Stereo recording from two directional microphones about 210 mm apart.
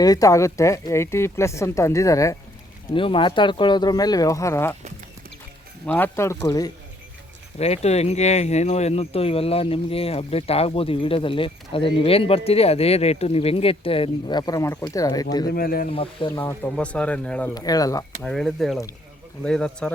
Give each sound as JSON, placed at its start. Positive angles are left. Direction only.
{"t": 0.0, "sound": "speech", "side_deg": 15}
{"t": 5.8, "sound": "speech", "side_deg": 10}
{"t": 7.6, "sound": "speech", "side_deg": 30}
{"t": 15.4, "sound": "speech", "side_deg": 45}
{"t": 15.9, "sound": "speech", "side_deg": 25}
{"t": 16.3, "sound": "speech", "side_deg": 10}
{"t": 17.5, "sound": "speech", "side_deg": 20}
{"t": 18.2, "sound": "speech", "side_deg": 5}